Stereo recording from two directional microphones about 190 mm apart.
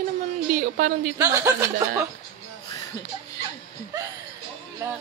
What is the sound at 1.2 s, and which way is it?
Speech, 15° right (ahead or behind).